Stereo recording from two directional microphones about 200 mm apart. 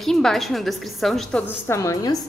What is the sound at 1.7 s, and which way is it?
Speech, 15° left (ahead or behind).